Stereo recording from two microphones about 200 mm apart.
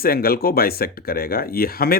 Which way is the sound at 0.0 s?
50° left (ahead or behind).